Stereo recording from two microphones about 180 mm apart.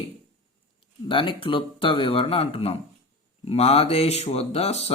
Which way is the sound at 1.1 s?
30° left (ahead or behind).